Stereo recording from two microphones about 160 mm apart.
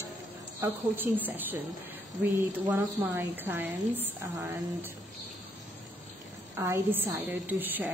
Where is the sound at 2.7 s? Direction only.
15° right (ahead or behind).